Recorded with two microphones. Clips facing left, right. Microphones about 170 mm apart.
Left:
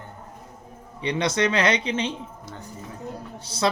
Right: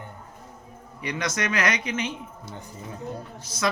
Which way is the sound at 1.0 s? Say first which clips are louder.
Left 6 dB; 30° left (ahead or behind).